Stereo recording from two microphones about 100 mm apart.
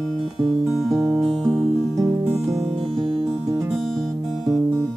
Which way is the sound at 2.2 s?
5° right (ahead or behind).